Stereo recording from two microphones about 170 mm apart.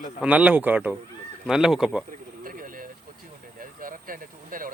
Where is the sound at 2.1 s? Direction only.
55° right (ahead or behind).